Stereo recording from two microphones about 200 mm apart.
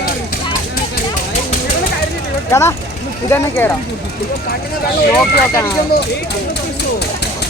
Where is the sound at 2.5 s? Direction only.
15° left (ahead or behind).